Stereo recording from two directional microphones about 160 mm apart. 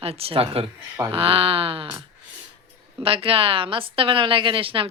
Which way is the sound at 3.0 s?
35° right (ahead or behind).